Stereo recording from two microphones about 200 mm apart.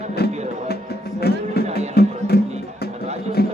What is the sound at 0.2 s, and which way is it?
Music, 50° left (ahead or behind).